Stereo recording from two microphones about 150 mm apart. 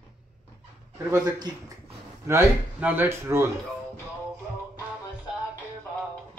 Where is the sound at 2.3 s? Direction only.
15° right (ahead or behind).